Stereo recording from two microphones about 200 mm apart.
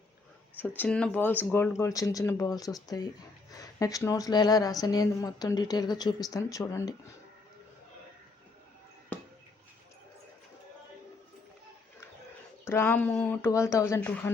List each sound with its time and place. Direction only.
0.8 s speech: 5° left (ahead or behind)
12.6 s speech: 10° left (ahead or behind)